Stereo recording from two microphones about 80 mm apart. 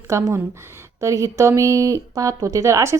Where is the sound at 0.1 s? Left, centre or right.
Right.